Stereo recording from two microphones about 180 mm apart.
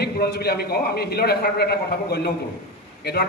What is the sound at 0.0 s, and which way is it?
A man's voice, 65° left (ahead or behind).